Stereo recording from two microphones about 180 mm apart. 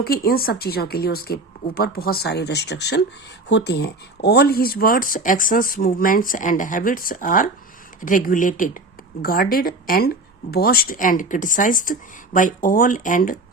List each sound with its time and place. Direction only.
0.0 s a woman's voice: 60° left (ahead or behind)